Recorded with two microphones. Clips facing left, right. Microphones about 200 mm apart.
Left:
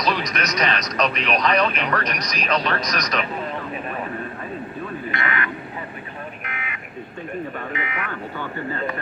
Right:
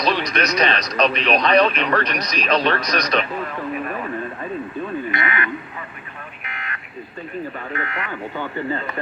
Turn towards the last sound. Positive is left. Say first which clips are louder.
# right 1 dB
turn(degrees=10)  # may be behind; listen again after turning